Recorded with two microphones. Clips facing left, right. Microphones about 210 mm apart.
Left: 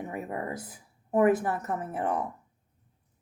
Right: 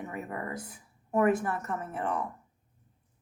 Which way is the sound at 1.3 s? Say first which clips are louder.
Left 2 dB; 35° left (ahead or behind).